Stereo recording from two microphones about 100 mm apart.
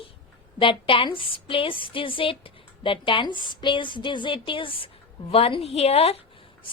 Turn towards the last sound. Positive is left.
turn(degrees=75)  # may be behind; listen again after turning